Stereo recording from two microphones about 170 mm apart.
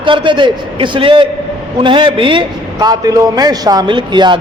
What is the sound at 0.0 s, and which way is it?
A woman's voice, 30° right (ahead or behind).